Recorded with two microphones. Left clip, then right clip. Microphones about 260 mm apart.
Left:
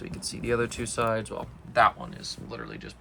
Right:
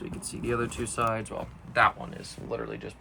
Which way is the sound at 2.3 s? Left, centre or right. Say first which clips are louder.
Right 6 dB; centre.